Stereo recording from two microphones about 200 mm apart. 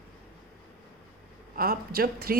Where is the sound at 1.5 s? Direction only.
45° right (ahead or behind).